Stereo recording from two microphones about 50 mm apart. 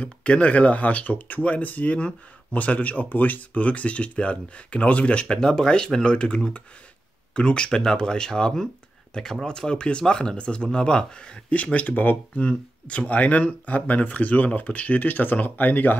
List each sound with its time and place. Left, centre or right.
0.0 s speech: left
11.5 s speech: left
12.4 s speech: left